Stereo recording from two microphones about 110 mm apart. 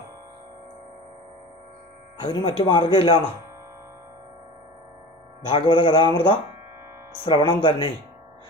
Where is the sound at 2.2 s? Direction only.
45° left (ahead or behind).